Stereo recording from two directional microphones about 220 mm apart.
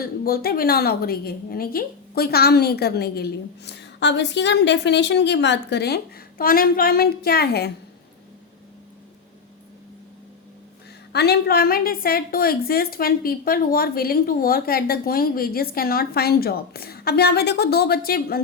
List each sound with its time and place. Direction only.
0.0 s a woman's voice: 45° left (ahead or behind)
11.1 s a woman's voice: 50° left (ahead or behind)